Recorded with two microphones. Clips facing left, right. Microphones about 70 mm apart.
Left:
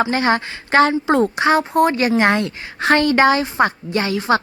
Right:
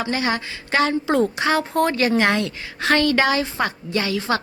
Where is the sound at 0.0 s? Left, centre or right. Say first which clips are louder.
Left 6 dB; left.